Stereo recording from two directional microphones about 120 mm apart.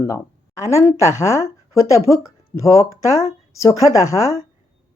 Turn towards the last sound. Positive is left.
turn(degrees=25)  # may be behind; listen again after turning